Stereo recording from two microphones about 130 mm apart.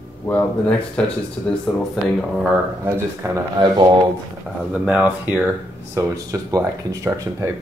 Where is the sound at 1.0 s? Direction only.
10° left (ahead or behind).